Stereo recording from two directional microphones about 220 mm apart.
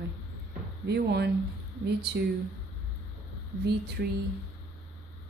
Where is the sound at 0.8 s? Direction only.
50° right (ahead or behind).